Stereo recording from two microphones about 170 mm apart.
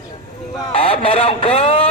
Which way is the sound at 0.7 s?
35° left (ahead or behind).